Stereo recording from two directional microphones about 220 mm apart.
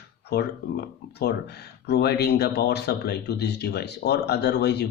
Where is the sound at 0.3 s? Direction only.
50° left (ahead or behind).